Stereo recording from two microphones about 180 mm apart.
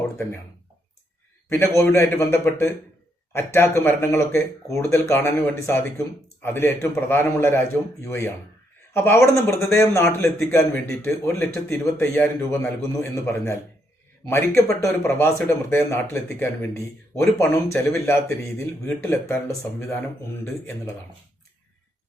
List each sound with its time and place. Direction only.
1.5 s speech: 15° left (ahead or behind)